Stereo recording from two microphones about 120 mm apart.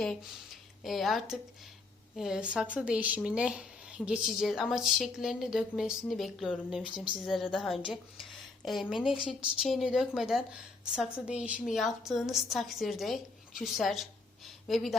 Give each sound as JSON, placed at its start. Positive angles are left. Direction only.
{"t": 0.0, "sound": "speech", "side_deg": 0}
{"t": 7.8, "sound": "speech", "side_deg": 45}
{"t": 8.6, "sound": "a woman's voice", "side_deg": 0}